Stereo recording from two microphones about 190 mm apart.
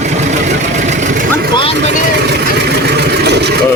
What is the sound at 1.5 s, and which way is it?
Speech, 25° left (ahead or behind).